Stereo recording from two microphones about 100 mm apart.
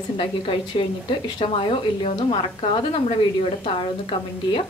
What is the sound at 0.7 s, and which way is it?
Speech, 60° left (ahead or behind).